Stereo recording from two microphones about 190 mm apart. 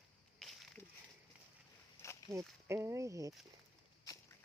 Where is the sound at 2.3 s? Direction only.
5° left (ahead or behind).